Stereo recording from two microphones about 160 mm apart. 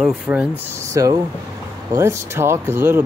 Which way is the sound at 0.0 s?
10° right (ahead or behind).